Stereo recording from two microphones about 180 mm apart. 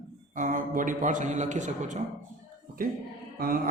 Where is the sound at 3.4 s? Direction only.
55° right (ahead or behind).